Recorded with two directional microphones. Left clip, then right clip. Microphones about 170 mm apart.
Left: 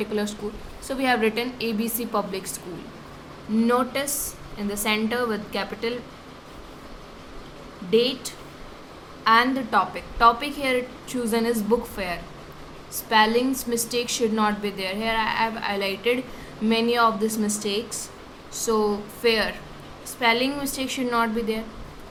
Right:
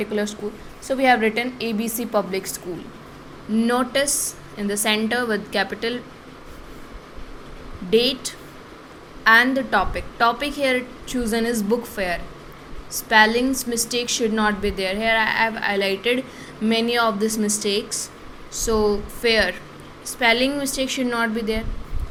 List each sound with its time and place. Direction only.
0.0 s a woman's voice: 15° right (ahead or behind)
3.6 s a woman's voice: 25° right (ahead or behind)
7.9 s a woman's voice: 25° right (ahead or behind)